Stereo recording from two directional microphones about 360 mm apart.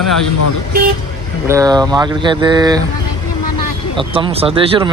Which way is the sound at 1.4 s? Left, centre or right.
Centre.